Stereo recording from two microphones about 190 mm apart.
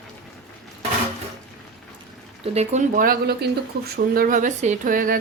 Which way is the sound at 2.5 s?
35° right (ahead or behind).